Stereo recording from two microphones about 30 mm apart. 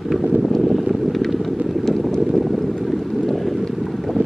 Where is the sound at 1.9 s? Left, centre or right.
Centre.